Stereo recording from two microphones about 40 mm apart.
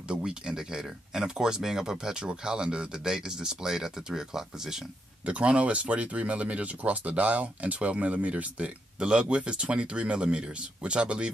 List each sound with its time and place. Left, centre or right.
0.1 s speech: right
5.2 s speech: right